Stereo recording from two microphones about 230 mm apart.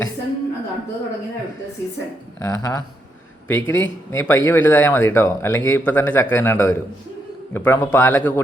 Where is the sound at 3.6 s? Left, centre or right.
Left.